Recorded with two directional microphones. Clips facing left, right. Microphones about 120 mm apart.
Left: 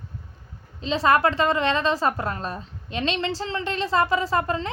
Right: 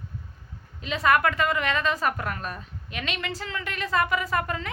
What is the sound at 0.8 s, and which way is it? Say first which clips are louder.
A woman's voice: left 3 dB; 30° left (ahead or behind).